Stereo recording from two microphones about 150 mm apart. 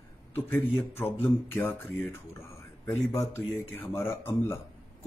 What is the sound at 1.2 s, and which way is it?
Speech, 15° left (ahead or behind).